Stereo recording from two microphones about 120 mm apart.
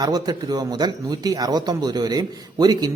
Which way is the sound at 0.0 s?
35° right (ahead or behind).